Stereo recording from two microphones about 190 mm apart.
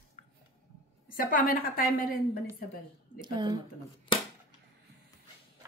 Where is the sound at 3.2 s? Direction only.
25° right (ahead or behind).